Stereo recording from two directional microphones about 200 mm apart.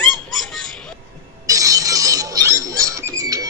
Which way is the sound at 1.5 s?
15° right (ahead or behind).